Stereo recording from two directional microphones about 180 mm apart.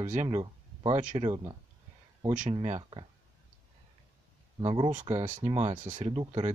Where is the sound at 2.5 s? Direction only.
30° right (ahead or behind).